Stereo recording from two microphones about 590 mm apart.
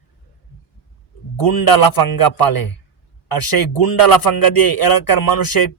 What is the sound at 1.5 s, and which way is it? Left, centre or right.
Speech, left.